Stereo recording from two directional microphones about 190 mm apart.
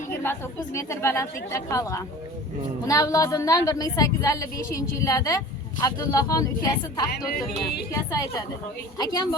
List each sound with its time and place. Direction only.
0.2 s a woman's voice: 15° left (ahead or behind)